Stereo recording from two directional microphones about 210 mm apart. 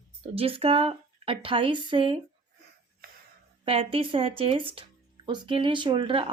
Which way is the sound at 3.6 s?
25° right (ahead or behind).